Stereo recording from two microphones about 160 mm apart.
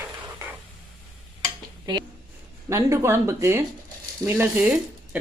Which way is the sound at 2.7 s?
20° right (ahead or behind).